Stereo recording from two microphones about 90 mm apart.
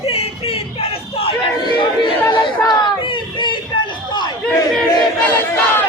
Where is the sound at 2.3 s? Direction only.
65° left (ahead or behind).